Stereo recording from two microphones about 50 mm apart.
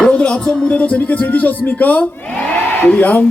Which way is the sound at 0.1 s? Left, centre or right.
Left.